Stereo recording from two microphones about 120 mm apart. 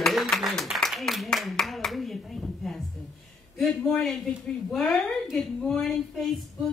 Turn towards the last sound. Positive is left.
turn(degrees=5)  # may be behind; listen again after turning